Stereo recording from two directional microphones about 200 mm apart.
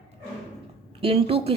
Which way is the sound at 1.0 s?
30° right (ahead or behind).